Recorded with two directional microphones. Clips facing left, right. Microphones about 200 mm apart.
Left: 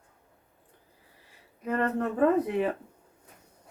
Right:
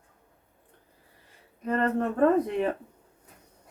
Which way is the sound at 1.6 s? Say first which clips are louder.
Right 2 dB; 5° left (ahead or behind).